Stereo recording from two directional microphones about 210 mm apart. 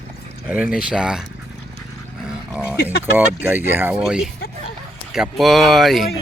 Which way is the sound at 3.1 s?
10° right (ahead or behind).